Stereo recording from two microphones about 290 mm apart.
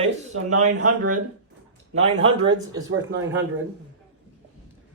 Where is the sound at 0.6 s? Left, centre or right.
Right.